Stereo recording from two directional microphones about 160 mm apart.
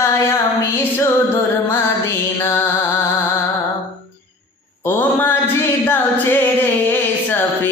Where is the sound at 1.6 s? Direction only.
15° left (ahead or behind).